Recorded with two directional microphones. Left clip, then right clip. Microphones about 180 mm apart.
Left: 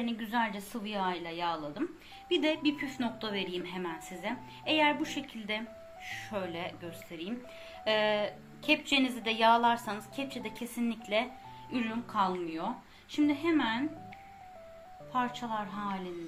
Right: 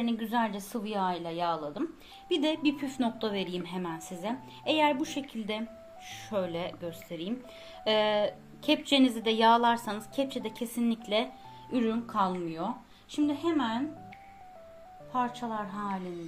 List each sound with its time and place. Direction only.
0.0 s a woman's voice: 60° right (ahead or behind)
15.1 s speech: 50° right (ahead or behind)